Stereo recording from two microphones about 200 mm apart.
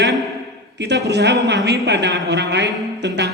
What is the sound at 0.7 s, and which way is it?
A man's voice, 60° right (ahead or behind).